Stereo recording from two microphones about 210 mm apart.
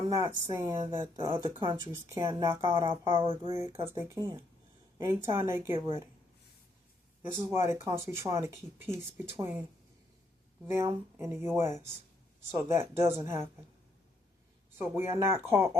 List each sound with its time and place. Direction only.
0.1 s speech: 15° right (ahead or behind)
7.2 s speech: 10° right (ahead or behind)
10.7 s speech: 15° right (ahead or behind)
14.8 s speech: 10° right (ahead or behind)